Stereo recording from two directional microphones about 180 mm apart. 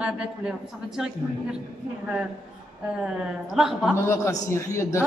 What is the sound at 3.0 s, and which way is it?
Speech, 5° right (ahead or behind).